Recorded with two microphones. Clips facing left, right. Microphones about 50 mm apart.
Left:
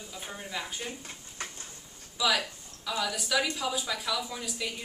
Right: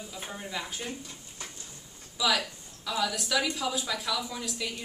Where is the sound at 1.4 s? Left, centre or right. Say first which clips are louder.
Left 4 dB; left.